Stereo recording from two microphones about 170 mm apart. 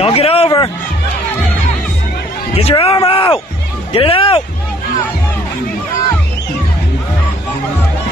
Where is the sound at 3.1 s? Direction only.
30° left (ahead or behind).